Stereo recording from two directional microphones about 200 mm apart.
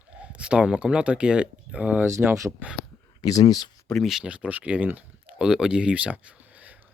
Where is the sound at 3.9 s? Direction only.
Centre (ahead or behind).